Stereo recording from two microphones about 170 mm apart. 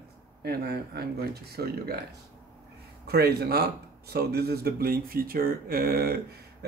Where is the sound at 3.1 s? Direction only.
70° right (ahead or behind).